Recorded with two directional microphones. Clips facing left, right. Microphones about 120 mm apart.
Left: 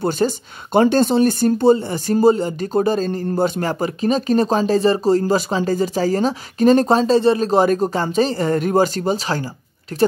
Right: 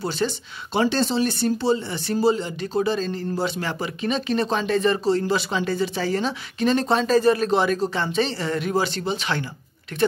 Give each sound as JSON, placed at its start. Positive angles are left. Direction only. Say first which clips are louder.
{"t": 0.0, "sound": "speech", "louder": "left 6 dB", "side_deg": 45}